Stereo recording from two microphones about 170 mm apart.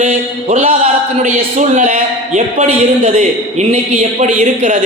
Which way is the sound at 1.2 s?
45° right (ahead or behind).